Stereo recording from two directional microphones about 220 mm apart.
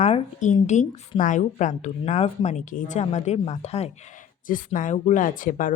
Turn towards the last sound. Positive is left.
turn(degrees=40)  # may be behind; listen again after turning